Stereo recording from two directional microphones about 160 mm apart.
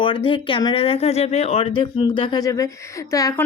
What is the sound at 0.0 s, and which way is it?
A woman's voice, 35° left (ahead or behind).